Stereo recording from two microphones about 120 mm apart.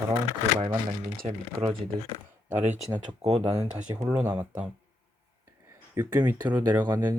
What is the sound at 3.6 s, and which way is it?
Speech, 30° right (ahead or behind).